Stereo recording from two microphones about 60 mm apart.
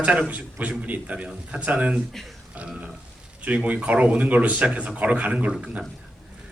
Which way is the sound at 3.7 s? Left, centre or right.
Right.